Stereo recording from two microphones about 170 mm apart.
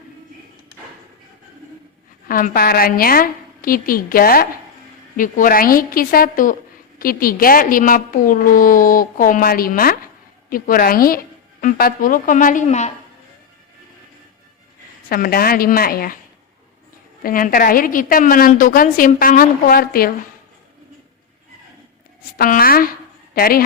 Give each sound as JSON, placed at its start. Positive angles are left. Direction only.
{"t": 2.2, "sound": "a woman's voice", "side_deg": 55}
{"t": 15.1, "sound": "a woman's voice", "side_deg": 60}
{"t": 17.2, "sound": "a woman's voice", "side_deg": 55}
{"t": 22.4, "sound": "a woman's voice", "side_deg": 60}